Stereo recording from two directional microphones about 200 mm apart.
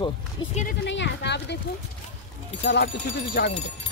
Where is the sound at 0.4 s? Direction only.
20° left (ahead or behind).